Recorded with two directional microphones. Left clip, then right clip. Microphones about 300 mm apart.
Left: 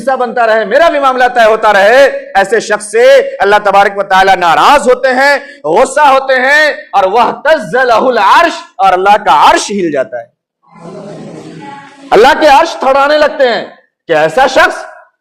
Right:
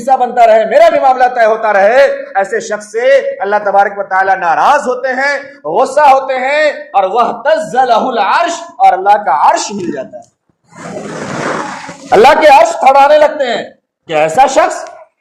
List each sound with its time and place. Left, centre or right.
0.0 s a man's voice: left
12.0 s a man's voice: left